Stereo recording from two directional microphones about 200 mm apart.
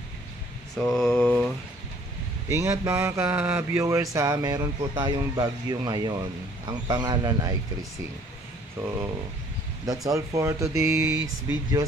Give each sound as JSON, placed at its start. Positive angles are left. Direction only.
{"t": 0.7, "sound": "mantra", "side_deg": 5}
{"t": 2.5, "sound": "mantra", "side_deg": -15}
{"t": 6.9, "sound": "speech", "side_deg": -20}
{"t": 9.8, "sound": "mantra", "side_deg": -15}